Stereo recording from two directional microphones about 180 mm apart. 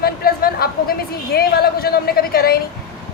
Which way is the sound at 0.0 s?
55° left (ahead or behind).